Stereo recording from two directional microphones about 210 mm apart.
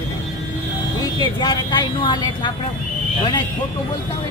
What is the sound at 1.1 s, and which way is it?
Speech, 20° left (ahead or behind).